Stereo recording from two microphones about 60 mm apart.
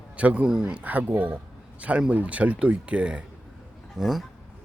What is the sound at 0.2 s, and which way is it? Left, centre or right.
Speech, right.